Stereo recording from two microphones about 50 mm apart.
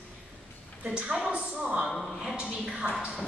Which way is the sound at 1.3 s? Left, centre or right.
Centre.